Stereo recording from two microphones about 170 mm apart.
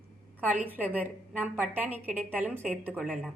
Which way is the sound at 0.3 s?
10° right (ahead or behind).